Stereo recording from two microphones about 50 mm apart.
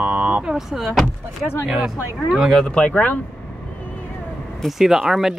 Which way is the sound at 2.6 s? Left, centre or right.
Centre.